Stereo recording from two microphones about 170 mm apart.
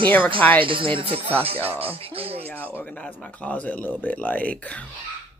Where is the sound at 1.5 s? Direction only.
35° right (ahead or behind).